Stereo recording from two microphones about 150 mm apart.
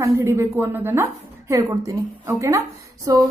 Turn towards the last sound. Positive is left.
turn(degrees=-25)  # may be behind; listen again after turning